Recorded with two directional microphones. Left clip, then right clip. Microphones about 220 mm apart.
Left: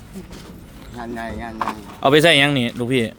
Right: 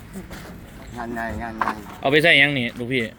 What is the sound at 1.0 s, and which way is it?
Speech, 10° left (ahead or behind).